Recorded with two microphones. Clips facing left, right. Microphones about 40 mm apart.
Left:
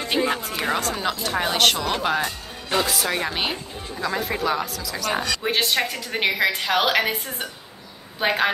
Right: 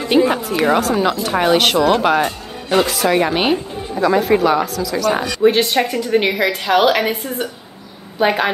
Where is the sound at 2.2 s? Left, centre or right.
Right.